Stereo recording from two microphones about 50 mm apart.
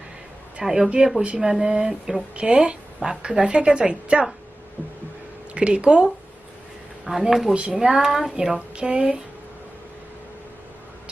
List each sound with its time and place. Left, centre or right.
0.6 s a woman's voice: centre
4.8 s a sound: right
5.5 s speech: right
7.0 s a woman's voice: centre
8.5 s speech: right